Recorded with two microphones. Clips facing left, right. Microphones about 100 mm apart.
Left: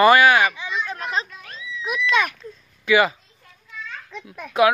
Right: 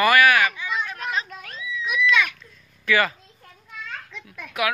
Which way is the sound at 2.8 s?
20° left (ahead or behind).